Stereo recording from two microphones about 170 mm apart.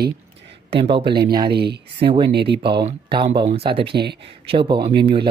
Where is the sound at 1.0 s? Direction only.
75° right (ahead or behind).